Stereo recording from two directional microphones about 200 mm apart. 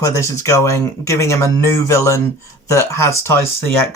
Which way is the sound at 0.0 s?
15° left (ahead or behind).